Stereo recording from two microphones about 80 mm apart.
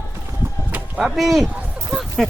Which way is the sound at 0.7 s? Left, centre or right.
Centre.